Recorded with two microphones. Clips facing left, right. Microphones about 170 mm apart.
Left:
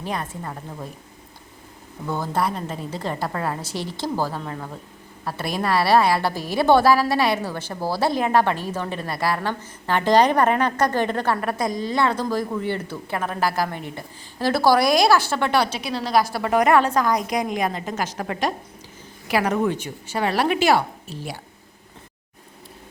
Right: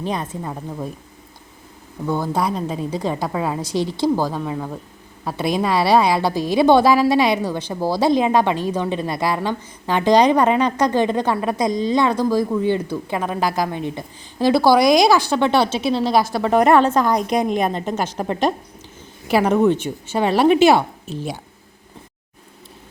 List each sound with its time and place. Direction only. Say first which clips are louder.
0.0 s a woman's voice: right 4 dB; 20° right (ahead or behind)
2.0 s a woman's voice: right 3 dB; 10° right (ahead or behind)